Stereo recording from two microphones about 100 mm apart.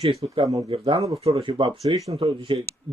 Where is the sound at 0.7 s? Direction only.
60° right (ahead or behind).